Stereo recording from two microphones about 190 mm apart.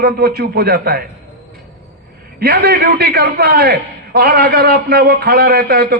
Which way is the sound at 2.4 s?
60° right (ahead or behind).